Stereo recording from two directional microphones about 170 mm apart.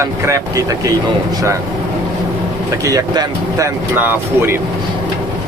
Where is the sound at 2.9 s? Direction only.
20° right (ahead or behind).